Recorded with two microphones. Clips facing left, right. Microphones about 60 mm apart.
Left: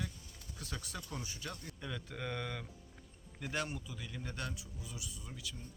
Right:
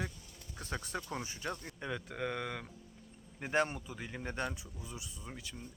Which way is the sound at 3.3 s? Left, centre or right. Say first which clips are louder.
Right 7 dB; right.